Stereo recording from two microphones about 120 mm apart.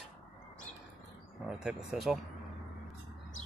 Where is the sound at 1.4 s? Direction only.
5° right (ahead or behind).